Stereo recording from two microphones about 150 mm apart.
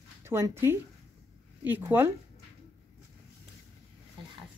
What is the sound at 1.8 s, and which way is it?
Speech, 15° right (ahead or behind).